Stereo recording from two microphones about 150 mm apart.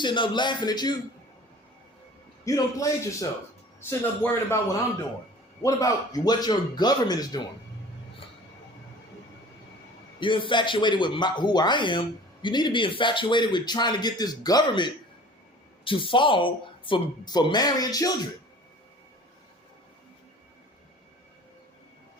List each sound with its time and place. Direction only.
0.0 s speech: 30° left (ahead or behind)
2.4 s speech: 20° left (ahead or behind)
5.6 s speech: 25° left (ahead or behind)
10.2 s speech: 35° left (ahead or behind)